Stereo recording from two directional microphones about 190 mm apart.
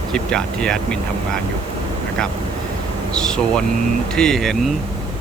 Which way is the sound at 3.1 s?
5° left (ahead or behind).